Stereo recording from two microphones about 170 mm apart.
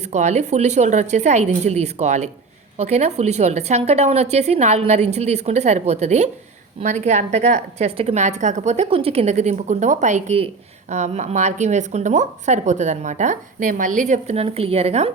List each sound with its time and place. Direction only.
0.0 s a woman's voice: 45° right (ahead or behind)